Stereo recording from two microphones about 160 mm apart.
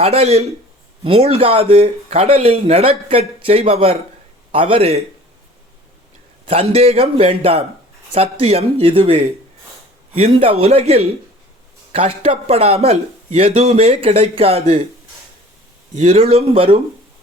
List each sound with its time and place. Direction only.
0.0 s speech: 40° right (ahead or behind)
6.5 s speech: 40° right (ahead or behind)
16.0 s speech: 40° right (ahead or behind)